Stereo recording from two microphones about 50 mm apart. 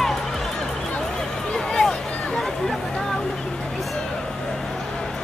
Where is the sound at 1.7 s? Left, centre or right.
Centre.